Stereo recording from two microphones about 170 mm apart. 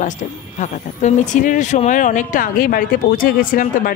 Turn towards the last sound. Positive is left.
turn(degrees=55)  # may be behind; listen again after turning